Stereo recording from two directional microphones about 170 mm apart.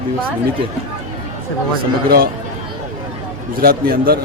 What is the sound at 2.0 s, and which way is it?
Speech, 65° right (ahead or behind).